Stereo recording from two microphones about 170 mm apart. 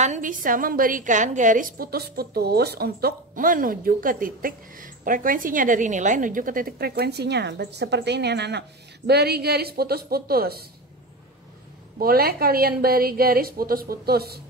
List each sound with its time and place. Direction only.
0.0 s a woman's voice: 45° right (ahead or behind); by 10.6 s 65° right (ahead or behind)
12.0 s a woman's voice: 60° right (ahead or behind)